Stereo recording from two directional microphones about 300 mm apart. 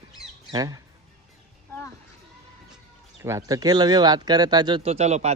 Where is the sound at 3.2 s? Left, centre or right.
Centre.